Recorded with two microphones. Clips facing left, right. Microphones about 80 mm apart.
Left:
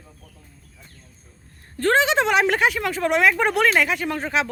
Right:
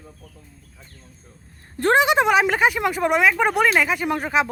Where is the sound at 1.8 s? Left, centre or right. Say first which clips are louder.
Right 2 dB; centre.